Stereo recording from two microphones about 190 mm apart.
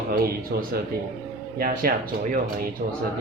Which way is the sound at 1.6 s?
50° right (ahead or behind).